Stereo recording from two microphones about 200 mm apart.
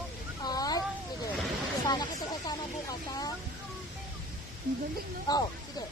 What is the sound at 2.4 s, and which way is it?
Snake, 20° left (ahead or behind).